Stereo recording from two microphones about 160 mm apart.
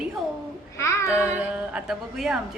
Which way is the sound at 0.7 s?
20° left (ahead or behind).